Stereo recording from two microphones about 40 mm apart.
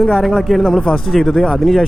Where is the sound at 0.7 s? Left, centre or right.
Left.